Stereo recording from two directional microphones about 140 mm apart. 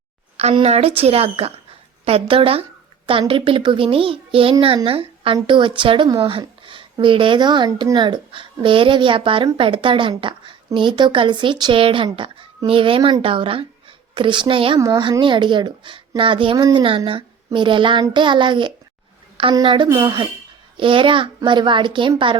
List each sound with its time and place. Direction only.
0.5 s a woman's voice: 45° right (ahead or behind)
14.8 s speech: 30° right (ahead or behind)